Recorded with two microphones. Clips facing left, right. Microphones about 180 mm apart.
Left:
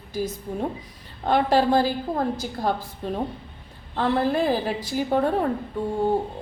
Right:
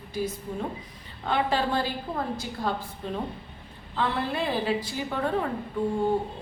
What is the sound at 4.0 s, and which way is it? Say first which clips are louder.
A woman's voice: left 6 dB; 40° left (ahead or behind).